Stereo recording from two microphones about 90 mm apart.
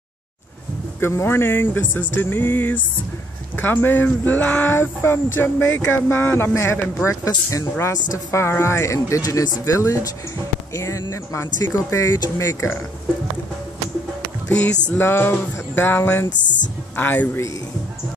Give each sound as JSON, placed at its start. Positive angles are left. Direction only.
{"t": 1.0, "sound": "speech", "side_deg": 30}
{"t": 7.8, "sound": "speech", "side_deg": 30}
{"t": 9.2, "sound": "speech", "side_deg": 45}
{"t": 14.5, "sound": "speech", "side_deg": 20}